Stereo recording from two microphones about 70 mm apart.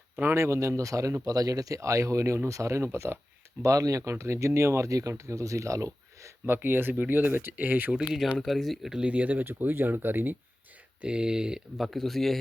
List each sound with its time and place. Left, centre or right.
0.3 s speech: right
3.6 s speech: right
4.1 s speech: right
6.4 s speech: right
8.4 s speech: centre
9.0 s speech: right
11.0 s speech: centre
11.9 s speech: centre